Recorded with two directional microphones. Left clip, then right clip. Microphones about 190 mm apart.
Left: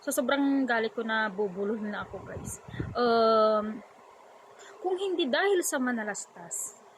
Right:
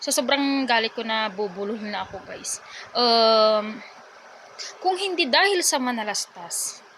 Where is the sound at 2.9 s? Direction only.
15° left (ahead or behind).